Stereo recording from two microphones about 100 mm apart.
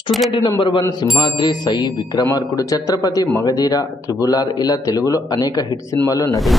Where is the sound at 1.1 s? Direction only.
45° left (ahead or behind).